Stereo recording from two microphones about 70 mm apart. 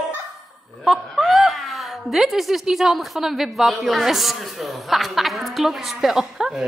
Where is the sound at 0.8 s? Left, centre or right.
Centre.